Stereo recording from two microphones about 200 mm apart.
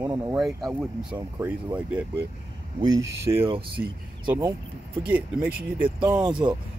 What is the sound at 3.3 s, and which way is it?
Speech, 20° right (ahead or behind).